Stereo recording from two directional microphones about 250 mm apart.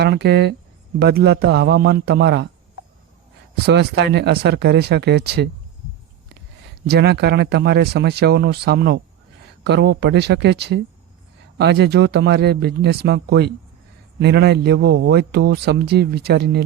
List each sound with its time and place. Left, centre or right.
0.0 s a man's voice: right
3.5 s a man's voice: right
6.8 s a man's voice: right